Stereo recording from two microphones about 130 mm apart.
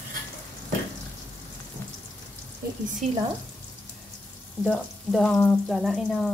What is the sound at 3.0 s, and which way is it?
Speech, 60° right (ahead or behind).